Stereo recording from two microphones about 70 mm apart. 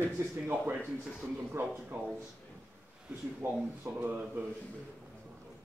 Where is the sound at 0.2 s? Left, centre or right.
Right.